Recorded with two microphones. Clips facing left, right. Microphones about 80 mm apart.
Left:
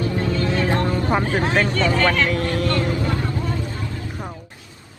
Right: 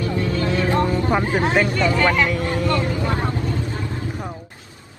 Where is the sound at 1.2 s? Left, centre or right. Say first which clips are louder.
Right 1 dB; right.